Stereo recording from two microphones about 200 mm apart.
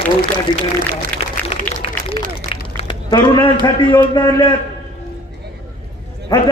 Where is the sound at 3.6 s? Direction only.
25° left (ahead or behind).